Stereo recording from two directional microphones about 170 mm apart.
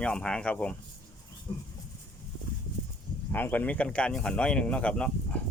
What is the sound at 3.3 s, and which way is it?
Speech, 10° left (ahead or behind).